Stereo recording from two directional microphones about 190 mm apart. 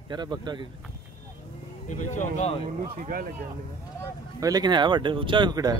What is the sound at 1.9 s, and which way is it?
Speech, 40° left (ahead or behind).